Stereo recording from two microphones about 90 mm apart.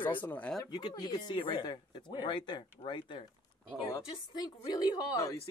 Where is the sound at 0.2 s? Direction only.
15° left (ahead or behind).